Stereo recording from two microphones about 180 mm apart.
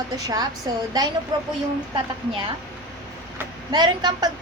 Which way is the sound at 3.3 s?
25° right (ahead or behind).